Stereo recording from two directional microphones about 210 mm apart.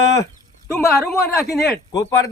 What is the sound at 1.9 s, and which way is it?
Speech, 15° left (ahead or behind).